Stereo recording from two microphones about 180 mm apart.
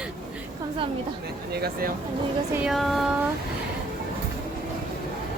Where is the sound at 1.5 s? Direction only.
60° right (ahead or behind).